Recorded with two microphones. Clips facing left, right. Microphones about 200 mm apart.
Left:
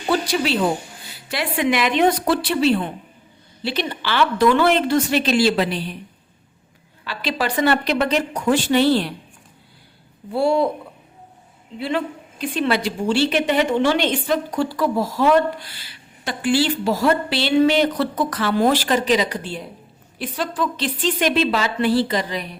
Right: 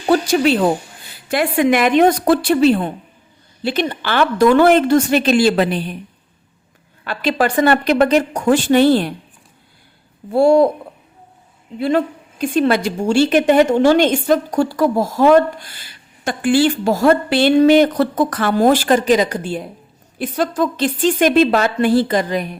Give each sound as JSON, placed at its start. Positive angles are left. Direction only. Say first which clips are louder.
{"t": 0.1, "sound": "a woman's voice", "louder": "right 6 dB", "side_deg": -50}
{"t": 7.0, "sound": "a woman's voice", "louder": "right 6 dB", "side_deg": -50}
{"t": 10.3, "sound": "a woman's voice", "louder": "right 7 dB", "side_deg": -45}
{"t": 11.8, "sound": "a woman's voice", "louder": "right 7 dB", "side_deg": -45}